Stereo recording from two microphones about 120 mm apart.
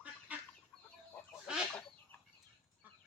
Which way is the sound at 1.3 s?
5° right (ahead or behind).